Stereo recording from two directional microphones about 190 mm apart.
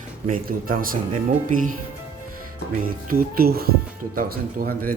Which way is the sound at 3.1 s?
50° right (ahead or behind).